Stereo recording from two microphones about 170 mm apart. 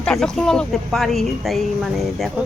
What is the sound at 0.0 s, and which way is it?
Speech, 5° left (ahead or behind).